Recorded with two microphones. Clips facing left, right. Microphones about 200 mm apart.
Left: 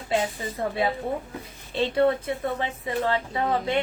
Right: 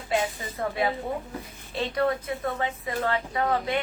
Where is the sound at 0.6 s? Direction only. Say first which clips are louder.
Left 1 dB; 25° left (ahead or behind).